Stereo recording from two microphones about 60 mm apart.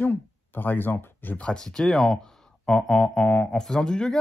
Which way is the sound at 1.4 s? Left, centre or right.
Centre.